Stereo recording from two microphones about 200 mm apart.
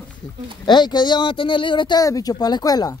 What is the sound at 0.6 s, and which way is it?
Speech, 20° left (ahead or behind).